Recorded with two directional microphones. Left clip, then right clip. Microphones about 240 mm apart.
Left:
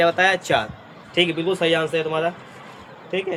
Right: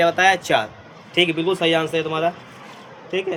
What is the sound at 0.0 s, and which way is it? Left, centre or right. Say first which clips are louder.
A man's voice: right 1 dB; right.